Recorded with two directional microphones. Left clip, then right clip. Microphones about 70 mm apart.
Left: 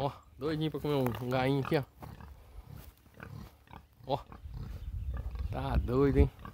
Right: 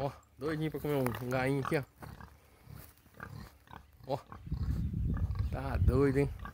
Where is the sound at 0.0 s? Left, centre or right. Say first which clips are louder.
Left 2 dB; left.